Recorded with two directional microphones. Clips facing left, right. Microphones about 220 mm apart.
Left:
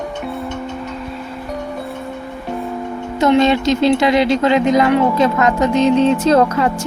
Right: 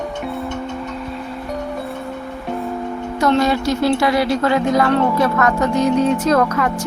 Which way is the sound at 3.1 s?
20° left (ahead or behind).